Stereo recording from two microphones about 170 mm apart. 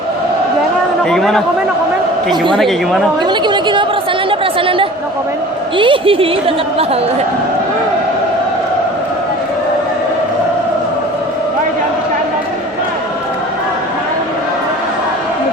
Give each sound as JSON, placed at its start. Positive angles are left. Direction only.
{"t": 1.1, "sound": "a woman's voice", "side_deg": 0}
{"t": 2.3, "sound": "a woman's voice", "side_deg": -30}
{"t": 2.6, "sound": "a woman's voice", "side_deg": 0}
{"t": 3.2, "sound": "a woman's voice", "side_deg": -25}
{"t": 4.3, "sound": "chatter", "side_deg": -30}
{"t": 5.7, "sound": "a woman's voice", "side_deg": -30}